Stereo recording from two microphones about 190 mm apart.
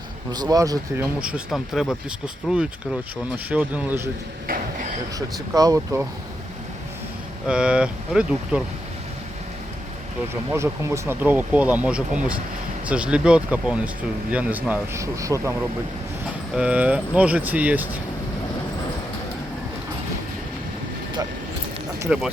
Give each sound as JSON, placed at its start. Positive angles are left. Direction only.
{"t": 0.3, "sound": "speech", "side_deg": -20}
{"t": 1.2, "sound": "speech", "side_deg": -5}
{"t": 4.4, "sound": "a sound", "side_deg": -50}
{"t": 5.5, "sound": "speech", "side_deg": -15}
{"t": 7.4, "sound": "speech", "side_deg": -5}
{"t": 10.5, "sound": "speech", "side_deg": -15}
{"t": 16.6, "sound": "speech", "side_deg": -5}
{"t": 22.1, "sound": "speech", "side_deg": -5}